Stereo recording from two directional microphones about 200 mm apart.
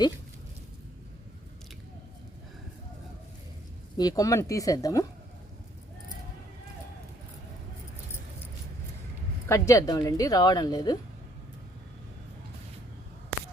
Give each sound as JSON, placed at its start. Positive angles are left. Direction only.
{"t": 3.9, "sound": "speech", "side_deg": 15}
{"t": 9.5, "sound": "a woman's voice", "side_deg": 15}